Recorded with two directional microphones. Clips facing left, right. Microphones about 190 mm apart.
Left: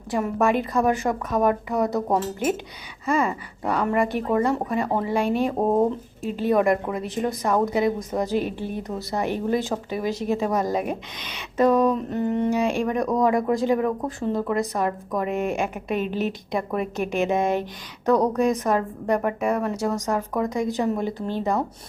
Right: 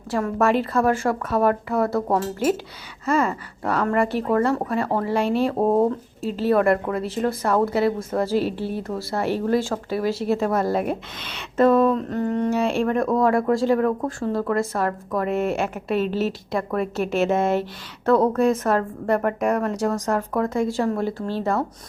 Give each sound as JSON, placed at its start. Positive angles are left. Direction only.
{"t": 0.1, "sound": "a woman's voice", "side_deg": 15}
{"t": 14.2, "sound": "a woman's voice", "side_deg": 20}